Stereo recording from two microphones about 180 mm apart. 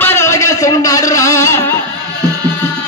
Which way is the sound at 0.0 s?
15° left (ahead or behind).